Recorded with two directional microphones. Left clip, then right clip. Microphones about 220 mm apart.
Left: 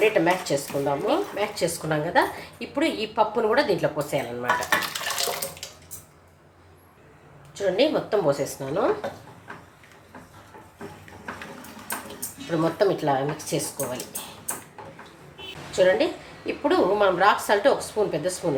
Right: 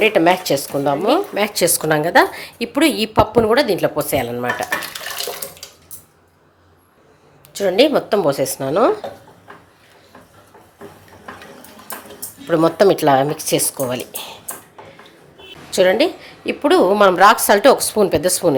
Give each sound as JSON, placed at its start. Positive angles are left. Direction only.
{"t": 0.0, "sound": "speech", "side_deg": -45}
{"t": 3.5, "sound": "speech", "side_deg": -40}
{"t": 7.5, "sound": "speech", "side_deg": -50}
{"t": 12.5, "sound": "speech", "side_deg": -50}
{"t": 15.7, "sound": "a woman's voice", "side_deg": -45}